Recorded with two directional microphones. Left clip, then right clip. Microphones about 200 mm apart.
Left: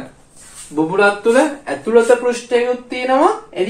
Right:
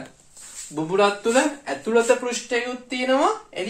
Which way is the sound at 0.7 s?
55° right (ahead or behind).